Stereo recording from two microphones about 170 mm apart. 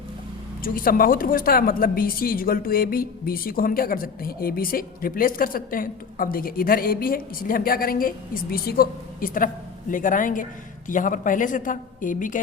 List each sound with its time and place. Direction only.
0.6 s a woman's voice: 55° left (ahead or behind)